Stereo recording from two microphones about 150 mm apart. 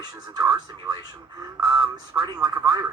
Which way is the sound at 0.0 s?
30° right (ahead or behind).